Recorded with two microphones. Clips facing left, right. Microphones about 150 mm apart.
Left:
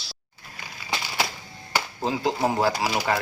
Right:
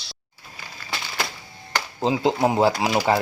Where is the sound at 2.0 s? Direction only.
20° right (ahead or behind).